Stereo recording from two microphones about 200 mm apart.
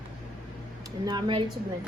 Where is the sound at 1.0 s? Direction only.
20° right (ahead or behind).